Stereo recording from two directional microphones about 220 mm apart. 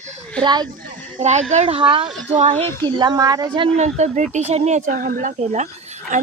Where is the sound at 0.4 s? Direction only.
20° right (ahead or behind).